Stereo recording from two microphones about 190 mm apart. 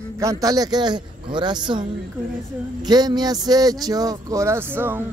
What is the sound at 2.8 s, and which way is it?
Speech, 20° right (ahead or behind).